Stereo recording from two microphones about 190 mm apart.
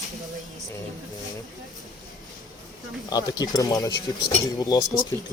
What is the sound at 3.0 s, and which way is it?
Speech, 20° left (ahead or behind).